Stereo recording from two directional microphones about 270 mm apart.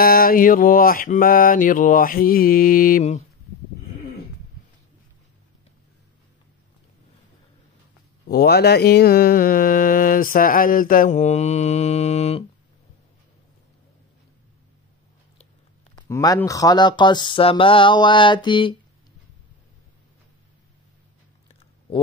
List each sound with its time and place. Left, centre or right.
0.0 s mantra: left
8.3 s mantra: left
16.0 s speech: centre